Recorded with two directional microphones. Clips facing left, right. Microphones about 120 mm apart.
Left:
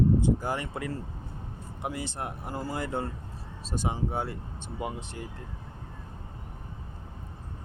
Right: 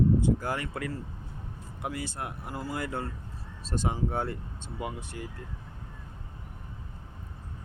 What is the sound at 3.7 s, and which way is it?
Speech, 10° left (ahead or behind).